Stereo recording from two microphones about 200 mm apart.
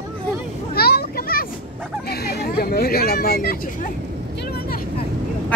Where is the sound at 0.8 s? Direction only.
50° left (ahead or behind).